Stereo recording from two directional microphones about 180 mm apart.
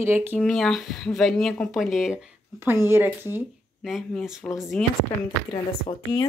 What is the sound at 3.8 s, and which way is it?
Speech, centre (ahead or behind).